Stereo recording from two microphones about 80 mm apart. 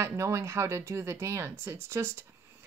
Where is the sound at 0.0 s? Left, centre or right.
Right.